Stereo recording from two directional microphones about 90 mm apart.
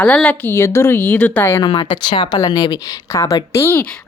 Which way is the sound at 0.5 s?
30° left (ahead or behind).